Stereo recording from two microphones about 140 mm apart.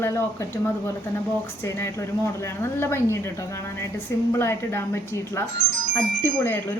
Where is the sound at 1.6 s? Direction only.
20° left (ahead or behind).